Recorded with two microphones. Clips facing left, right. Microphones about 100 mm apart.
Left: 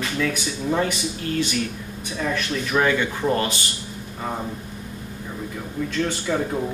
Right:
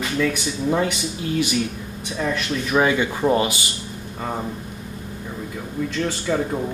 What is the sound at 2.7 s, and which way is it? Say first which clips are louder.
Speech: right 2 dB; 15° right (ahead or behind).